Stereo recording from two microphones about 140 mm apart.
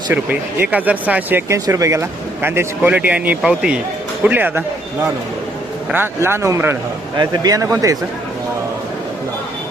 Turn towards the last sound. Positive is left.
turn(degrees=-25)  # may be behind; listen again after turning